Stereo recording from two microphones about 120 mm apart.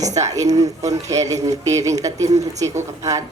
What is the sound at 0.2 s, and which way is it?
Speech, 30° right (ahead or behind).